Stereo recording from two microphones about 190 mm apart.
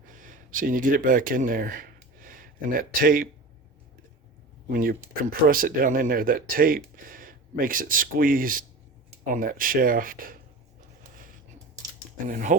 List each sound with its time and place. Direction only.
0.0 s a sound: 45° right (ahead or behind)
4.7 s speech: 50° right (ahead or behind)
12.2 s speech: 45° right (ahead or behind)